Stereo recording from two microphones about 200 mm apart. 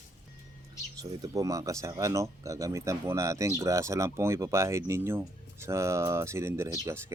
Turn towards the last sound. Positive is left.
turn(degrees=-15)  # may be behind; listen again after turning